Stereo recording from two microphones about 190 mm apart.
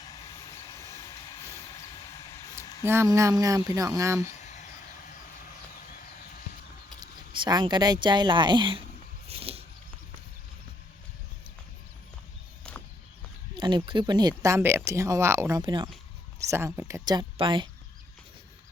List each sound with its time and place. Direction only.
0.3 s vehicle: 20° left (ahead or behind)
2.8 s speech: 15° right (ahead or behind)
4.2 s a sound: 40° left (ahead or behind)
7.0 s speech: 20° right (ahead or behind)
9.2 s a sound: 30° right (ahead or behind)
13.6 s speech: 25° right (ahead or behind)
16.5 s speech: 15° right (ahead or behind)